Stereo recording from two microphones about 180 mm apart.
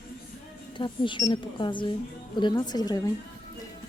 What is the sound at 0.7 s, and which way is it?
Speech, 25° left (ahead or behind).